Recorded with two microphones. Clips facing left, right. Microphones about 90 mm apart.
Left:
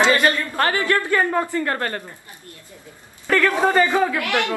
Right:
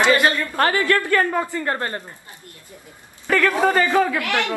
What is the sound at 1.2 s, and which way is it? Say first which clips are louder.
Speech: even; centre (ahead or behind).